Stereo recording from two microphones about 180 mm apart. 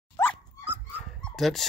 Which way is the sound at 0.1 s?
10° left (ahead or behind).